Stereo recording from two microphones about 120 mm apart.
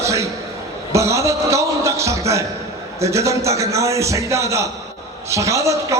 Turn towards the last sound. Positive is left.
turn(degrees=-25)  # may be behind; listen again after turning